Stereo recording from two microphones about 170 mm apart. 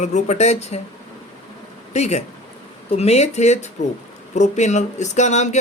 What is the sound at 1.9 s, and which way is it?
Speech, 40° left (ahead or behind).